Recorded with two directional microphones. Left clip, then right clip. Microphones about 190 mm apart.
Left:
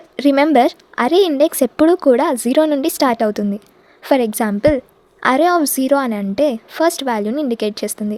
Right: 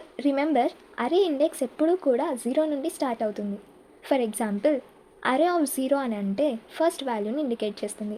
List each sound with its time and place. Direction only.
0.2 s a woman's voice: 45° left (ahead or behind)